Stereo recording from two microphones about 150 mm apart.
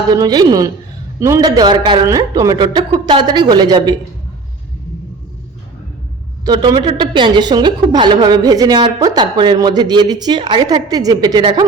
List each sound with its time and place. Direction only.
0.1 s a woman's voice: 25° right (ahead or behind)
6.4 s a woman's voice: 25° right (ahead or behind)